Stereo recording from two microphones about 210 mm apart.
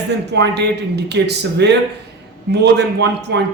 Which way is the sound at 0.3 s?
55° right (ahead or behind).